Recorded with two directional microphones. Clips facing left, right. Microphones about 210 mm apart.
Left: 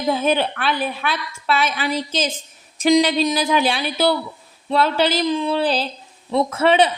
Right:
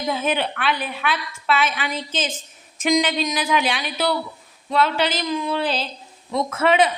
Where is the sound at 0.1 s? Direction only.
35° left (ahead or behind).